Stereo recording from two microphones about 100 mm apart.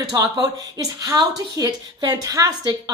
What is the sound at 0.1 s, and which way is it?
A woman's voice, 35° right (ahead or behind).